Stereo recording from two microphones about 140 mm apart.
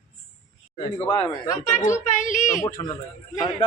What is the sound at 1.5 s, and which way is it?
A woman's voice, 65° left (ahead or behind).